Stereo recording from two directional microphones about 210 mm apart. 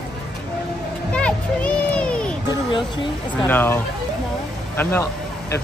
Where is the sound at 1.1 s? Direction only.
5° left (ahead or behind).